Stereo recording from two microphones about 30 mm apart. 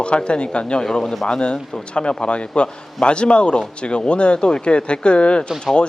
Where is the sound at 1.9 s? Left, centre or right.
Left.